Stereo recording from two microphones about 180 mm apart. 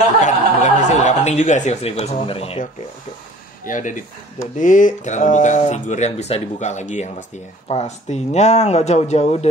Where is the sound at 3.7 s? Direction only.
45° left (ahead or behind).